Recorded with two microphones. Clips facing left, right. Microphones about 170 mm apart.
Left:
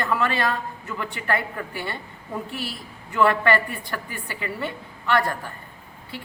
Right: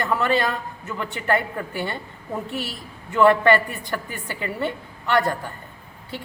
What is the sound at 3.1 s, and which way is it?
Speech, 25° right (ahead or behind).